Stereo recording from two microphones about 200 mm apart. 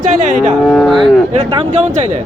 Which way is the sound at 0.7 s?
Centre (ahead or behind).